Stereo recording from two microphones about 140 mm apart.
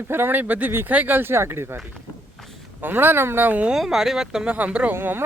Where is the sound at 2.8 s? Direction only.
15° right (ahead or behind).